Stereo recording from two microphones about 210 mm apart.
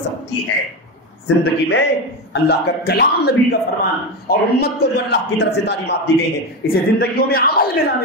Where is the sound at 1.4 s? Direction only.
50° left (ahead or behind).